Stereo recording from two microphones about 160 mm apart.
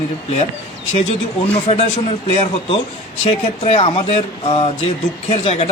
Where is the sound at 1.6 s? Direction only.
35° left (ahead or behind).